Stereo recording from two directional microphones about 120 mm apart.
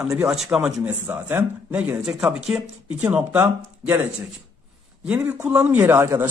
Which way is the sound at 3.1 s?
15° right (ahead or behind).